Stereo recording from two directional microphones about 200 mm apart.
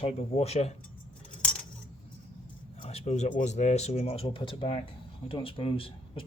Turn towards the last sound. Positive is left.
turn(degrees=25)  # may be behind; listen again after turning